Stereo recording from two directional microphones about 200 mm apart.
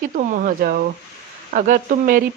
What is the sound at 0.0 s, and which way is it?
Speech, 40° right (ahead or behind).